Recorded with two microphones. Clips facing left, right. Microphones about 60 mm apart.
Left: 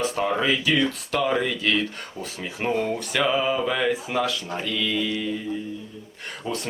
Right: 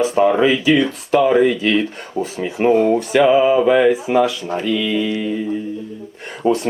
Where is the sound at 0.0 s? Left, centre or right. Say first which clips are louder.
Right 9 dB; right.